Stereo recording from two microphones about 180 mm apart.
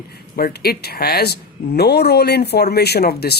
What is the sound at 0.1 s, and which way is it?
Speech, 60° left (ahead or behind).